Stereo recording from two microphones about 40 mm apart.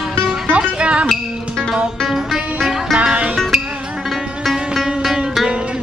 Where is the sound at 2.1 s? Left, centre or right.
Centre.